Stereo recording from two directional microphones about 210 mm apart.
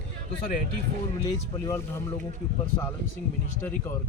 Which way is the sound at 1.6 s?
15° left (ahead or behind).